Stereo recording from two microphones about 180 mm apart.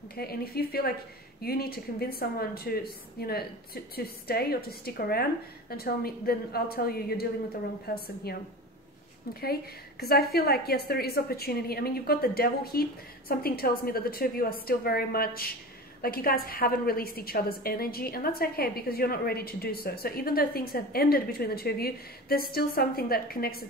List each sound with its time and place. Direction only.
0.1 s a woman's voice: 60° left (ahead or behind)